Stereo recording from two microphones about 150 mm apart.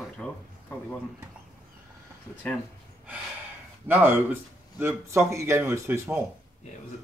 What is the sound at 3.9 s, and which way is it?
Speech, 15° right (ahead or behind).